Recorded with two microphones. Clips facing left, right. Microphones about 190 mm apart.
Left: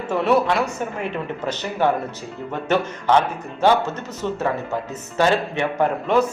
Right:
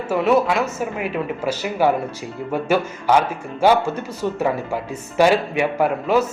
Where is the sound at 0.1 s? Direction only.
5° right (ahead or behind).